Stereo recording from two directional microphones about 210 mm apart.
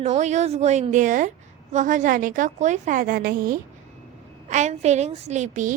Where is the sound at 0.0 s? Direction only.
35° right (ahead or behind).